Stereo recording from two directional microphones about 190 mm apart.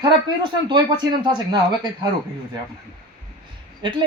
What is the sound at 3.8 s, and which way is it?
Speech, 25° right (ahead or behind).